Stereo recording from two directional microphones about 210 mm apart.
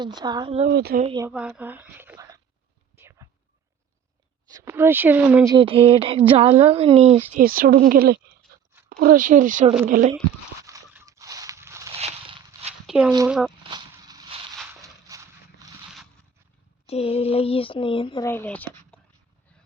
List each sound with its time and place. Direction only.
0.0 s speech: 20° right (ahead or behind)
0.7 s speech: 50° right (ahead or behind)
1.0 s speech: 20° right (ahead or behind)
1.3 s speech: 5° right (ahead or behind)
3.0 s a sound: 10° right (ahead or behind)
4.4 s speech: 15° right (ahead or behind)
5.5 s speech: 25° right (ahead or behind)
7.3 s speech: 40° right (ahead or behind)
10.6 s a sound: 15° right (ahead or behind)
11.9 s a sound: 30° right (ahead or behind)
12.9 s speech: 5° right (ahead or behind)
13.7 s a sound: 20° right (ahead or behind)
16.8 s speech: 30° left (ahead or behind)
18.3 s speech: 10° left (ahead or behind)